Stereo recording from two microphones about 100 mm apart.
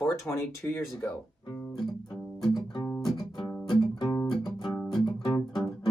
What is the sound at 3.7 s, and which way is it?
Music, 45° left (ahead or behind).